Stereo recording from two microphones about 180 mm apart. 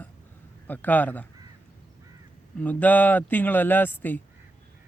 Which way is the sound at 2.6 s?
10° left (ahead or behind).